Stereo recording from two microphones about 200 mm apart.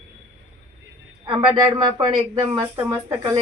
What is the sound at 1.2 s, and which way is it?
Speech, 25° right (ahead or behind).